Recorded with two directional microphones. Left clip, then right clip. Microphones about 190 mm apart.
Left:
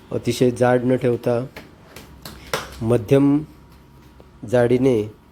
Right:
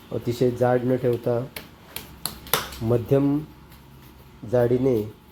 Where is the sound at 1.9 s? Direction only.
5° right (ahead or behind).